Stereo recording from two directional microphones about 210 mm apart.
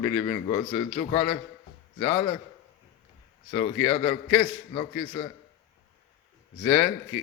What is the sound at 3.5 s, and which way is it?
A man's voice, 25° left (ahead or behind).